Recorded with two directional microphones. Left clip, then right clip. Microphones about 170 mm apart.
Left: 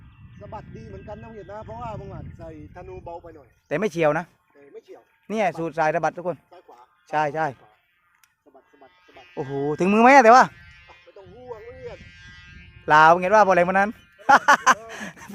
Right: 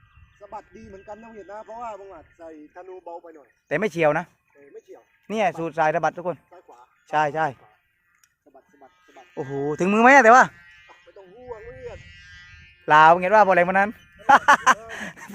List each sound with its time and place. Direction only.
0.3 s speech: 50° right (ahead or behind); by 2.2 s 30° right (ahead or behind)
2.4 s speech: 10° right (ahead or behind)
3.3 s speech: 10° left (ahead or behind)
6.5 s music: centre (ahead or behind)
6.7 s a sound: 5° left (ahead or behind)
9.0 s speech: 5° left (ahead or behind)
11.9 s a sound: 40° left (ahead or behind)
12.8 s speech: 15° left (ahead or behind)